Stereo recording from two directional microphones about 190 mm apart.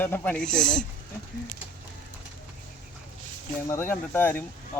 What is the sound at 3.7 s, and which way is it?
Speech, 10° left (ahead or behind).